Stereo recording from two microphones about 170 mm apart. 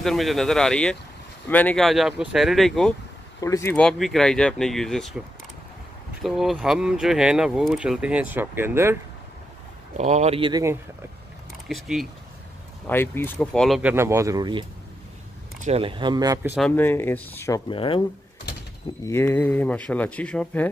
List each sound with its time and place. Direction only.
0.0 s speech: centre (ahead or behind)
3.3 s speech: 20° left (ahead or behind)
3.7 s speech: centre (ahead or behind)
6.2 s speech: centre (ahead or behind)
9.9 s speech: 45° right (ahead or behind)
10.5 s speech: 15° right (ahead or behind)
11.7 s speech: centre (ahead or behind)
12.8 s speech: 15° left (ahead or behind); by 16.5 s 20° right (ahead or behind)
16.5 s speech: 10° left (ahead or behind)
17.6 s speech: 30° left (ahead or behind)
19.0 s speech: 15° left (ahead or behind)